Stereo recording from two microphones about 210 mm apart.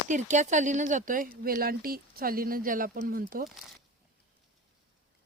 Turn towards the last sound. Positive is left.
turn(degrees=-40)  # may be behind; listen again after turning